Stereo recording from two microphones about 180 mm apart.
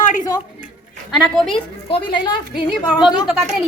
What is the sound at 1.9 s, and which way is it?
Speech, 25° left (ahead or behind).